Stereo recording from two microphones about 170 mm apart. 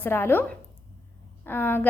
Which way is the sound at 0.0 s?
15° left (ahead or behind).